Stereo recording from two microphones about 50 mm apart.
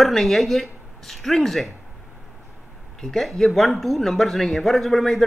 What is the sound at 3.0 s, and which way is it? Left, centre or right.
Speech, centre.